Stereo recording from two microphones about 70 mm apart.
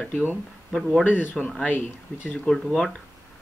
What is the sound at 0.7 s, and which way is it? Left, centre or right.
Speech, centre.